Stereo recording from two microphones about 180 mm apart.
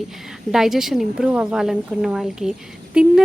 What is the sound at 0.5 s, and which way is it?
Speech, centre (ahead or behind).